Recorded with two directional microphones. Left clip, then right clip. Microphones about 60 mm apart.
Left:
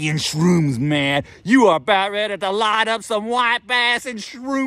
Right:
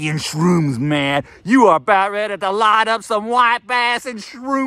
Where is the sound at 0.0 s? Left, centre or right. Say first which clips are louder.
Right 1 dB; left.